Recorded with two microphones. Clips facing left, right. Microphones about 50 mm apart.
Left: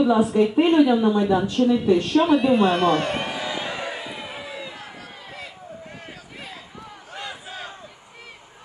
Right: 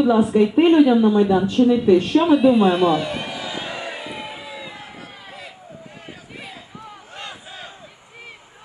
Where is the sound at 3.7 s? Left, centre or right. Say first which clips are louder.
Right 1 dB; centre.